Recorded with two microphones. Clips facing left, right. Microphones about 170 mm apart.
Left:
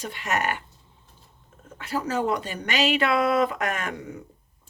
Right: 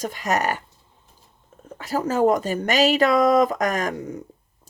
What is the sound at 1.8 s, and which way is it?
A woman's voice, 40° right (ahead or behind).